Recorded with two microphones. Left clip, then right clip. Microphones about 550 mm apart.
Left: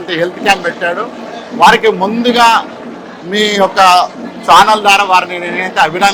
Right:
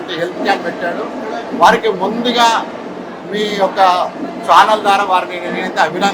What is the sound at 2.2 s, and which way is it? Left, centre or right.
A man's voice, left.